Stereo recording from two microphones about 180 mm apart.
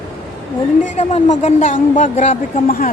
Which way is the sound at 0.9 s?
40° left (ahead or behind).